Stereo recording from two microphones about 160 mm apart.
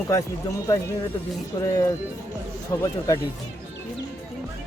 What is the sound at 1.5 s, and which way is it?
Speech, 25° left (ahead or behind).